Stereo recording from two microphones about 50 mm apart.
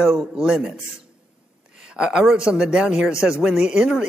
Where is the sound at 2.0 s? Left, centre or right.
Centre.